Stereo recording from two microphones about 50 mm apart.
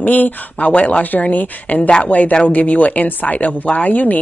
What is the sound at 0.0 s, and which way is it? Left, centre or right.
Speech, left.